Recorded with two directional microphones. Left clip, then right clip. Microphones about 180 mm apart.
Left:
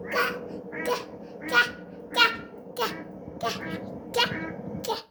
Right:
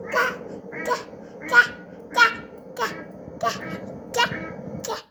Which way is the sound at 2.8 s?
20° left (ahead or behind).